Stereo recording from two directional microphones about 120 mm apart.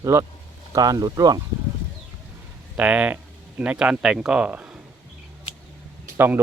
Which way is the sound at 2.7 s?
10° right (ahead or behind).